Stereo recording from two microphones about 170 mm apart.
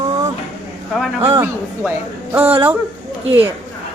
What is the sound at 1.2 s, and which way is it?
Speech, 15° right (ahead or behind).